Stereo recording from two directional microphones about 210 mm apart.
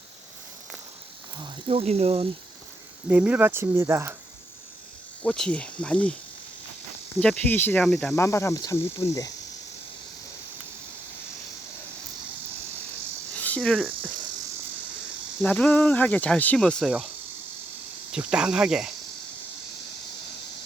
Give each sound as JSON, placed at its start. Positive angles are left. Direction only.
{"t": 1.6, "sound": "speech", "side_deg": -30}
{"t": 3.1, "sound": "speech", "side_deg": -5}
{"t": 5.2, "sound": "speech", "side_deg": 5}
{"t": 7.2, "sound": "speech", "side_deg": 5}
{"t": 8.1, "sound": "speech", "side_deg": 15}
{"t": 13.3, "sound": "cricket", "side_deg": 5}
{"t": 15.4, "sound": "speech", "side_deg": 5}
{"t": 18.1, "sound": "speech", "side_deg": -5}